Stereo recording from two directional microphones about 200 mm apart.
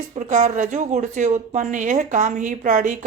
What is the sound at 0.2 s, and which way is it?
A woman's voice, 40° right (ahead or behind).